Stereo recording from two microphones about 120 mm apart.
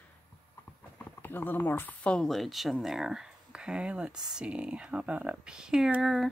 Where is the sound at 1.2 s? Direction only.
15° left (ahead or behind); by 6.2 s centre (ahead or behind).